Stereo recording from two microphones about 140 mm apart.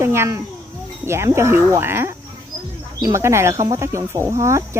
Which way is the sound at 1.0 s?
20° right (ahead or behind).